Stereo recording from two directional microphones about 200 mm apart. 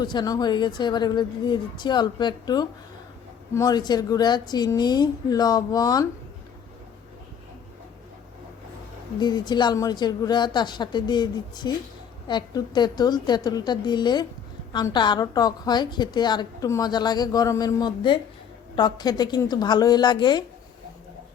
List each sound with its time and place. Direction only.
0.0 s a woman's voice: 20° left (ahead or behind)
9.1 s a woman's voice: 20° left (ahead or behind)